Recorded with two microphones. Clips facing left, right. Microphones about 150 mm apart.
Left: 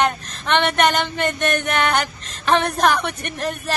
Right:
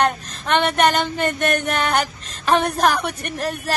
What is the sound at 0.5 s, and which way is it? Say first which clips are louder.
Speech: right 1 dB; 5° right (ahead or behind).